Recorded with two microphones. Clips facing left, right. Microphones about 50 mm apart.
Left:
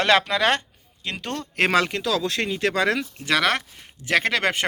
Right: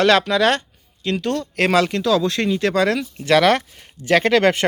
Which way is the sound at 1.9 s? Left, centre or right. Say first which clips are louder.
Right 6 dB; centre.